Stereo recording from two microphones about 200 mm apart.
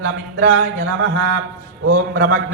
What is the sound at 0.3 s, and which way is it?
Speech, 65° right (ahead or behind).